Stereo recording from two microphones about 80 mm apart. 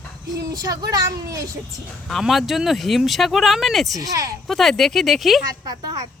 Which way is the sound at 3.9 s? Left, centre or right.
Right.